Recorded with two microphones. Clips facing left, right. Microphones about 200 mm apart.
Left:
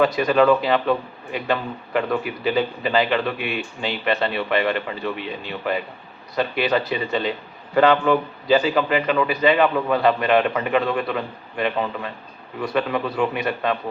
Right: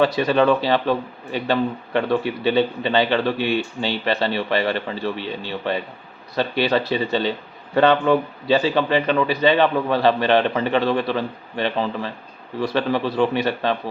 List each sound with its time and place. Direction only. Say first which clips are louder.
0.0 s a man's voice: even; 30° right (ahead or behind)
8.4 s a man's voice: even; 30° right (ahead or behind)